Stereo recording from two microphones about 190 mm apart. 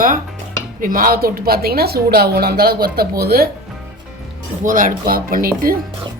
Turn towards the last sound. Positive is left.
turn(degrees=-50)  # may be behind; listen again after turning